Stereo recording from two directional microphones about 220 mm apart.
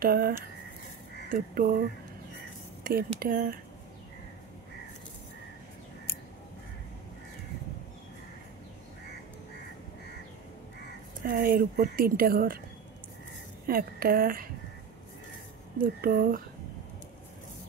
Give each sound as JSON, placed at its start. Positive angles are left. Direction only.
{"t": 0.0, "sound": "a woman's voice", "side_deg": -40}
{"t": 1.3, "sound": "a woman's voice", "side_deg": -40}
{"t": 2.8, "sound": "a woman's voice", "side_deg": -40}
{"t": 11.2, "sound": "a woman's voice", "side_deg": -40}
{"t": 13.7, "sound": "a woman's voice", "side_deg": -40}
{"t": 15.8, "sound": "a woman's voice", "side_deg": -40}